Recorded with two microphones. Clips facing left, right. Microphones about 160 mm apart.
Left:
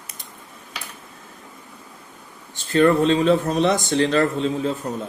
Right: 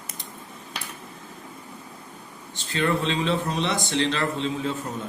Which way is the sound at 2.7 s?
45° left (ahead or behind).